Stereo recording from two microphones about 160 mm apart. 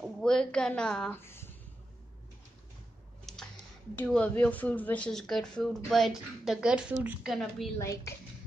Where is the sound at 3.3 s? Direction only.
Centre (ahead or behind).